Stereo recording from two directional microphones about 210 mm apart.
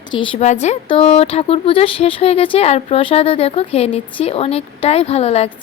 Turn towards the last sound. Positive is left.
turn(degrees=30)  # may be behind; listen again after turning